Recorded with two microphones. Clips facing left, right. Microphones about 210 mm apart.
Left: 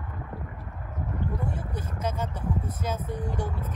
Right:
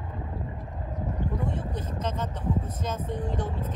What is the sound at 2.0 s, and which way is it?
Speech, 10° left (ahead or behind).